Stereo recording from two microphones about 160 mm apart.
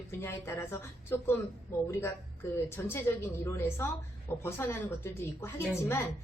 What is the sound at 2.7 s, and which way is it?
Speech, 15° left (ahead or behind).